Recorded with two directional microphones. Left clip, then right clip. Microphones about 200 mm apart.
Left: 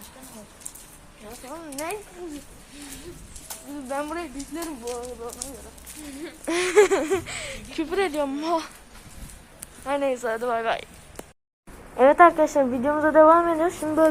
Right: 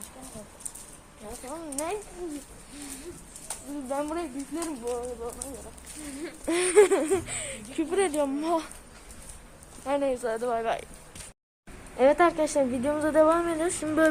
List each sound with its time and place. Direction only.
1.5 s a woman's voice: centre (ahead or behind)
3.5 s a woman's voice: 5° left (ahead or behind)
9.8 s speech: 10° left (ahead or behind)
11.9 s a woman's voice: 5° left (ahead or behind)